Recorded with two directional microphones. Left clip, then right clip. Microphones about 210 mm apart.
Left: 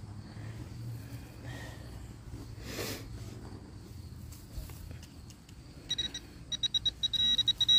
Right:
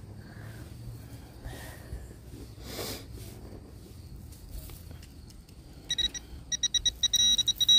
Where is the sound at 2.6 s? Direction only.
Centre (ahead or behind).